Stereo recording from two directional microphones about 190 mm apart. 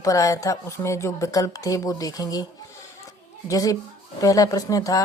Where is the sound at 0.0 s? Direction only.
15° left (ahead or behind).